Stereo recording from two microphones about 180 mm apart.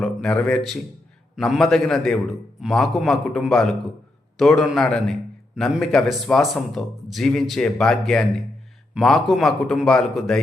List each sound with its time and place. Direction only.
0.0 s a man's voice: 5° left (ahead or behind)